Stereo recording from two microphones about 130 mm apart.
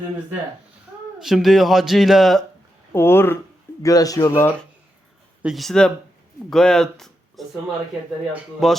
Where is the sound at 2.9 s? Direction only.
20° left (ahead or behind).